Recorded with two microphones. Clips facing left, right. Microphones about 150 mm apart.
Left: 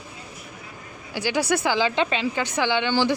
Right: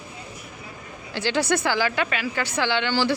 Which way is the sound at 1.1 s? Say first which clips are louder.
Even; 10° left (ahead or behind).